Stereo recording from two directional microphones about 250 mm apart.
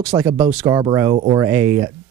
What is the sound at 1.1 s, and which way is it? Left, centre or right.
Speech, right.